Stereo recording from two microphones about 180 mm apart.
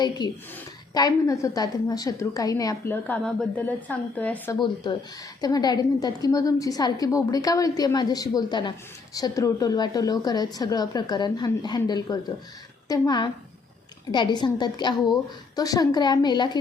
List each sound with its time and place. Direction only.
0.2 s a woman's voice: 25° left (ahead or behind); by 4.5 s 10° left (ahead or behind)
4.6 s a woman's voice: 25° left (ahead or behind)